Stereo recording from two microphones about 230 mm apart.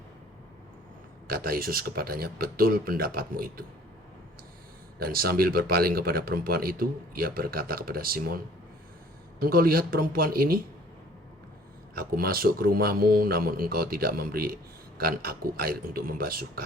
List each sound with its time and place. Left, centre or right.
1.3 s a man's voice: right
4.9 s a man's voice: right
9.4 s a man's voice: right
11.9 s a man's voice: right